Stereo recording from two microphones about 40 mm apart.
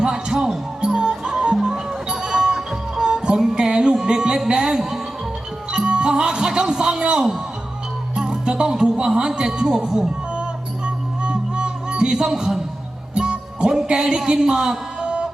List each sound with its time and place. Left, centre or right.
0.0 s music: centre
8.1 s speech: right
10.8 s music: right
14.3 s speech: centre
15.0 s music: right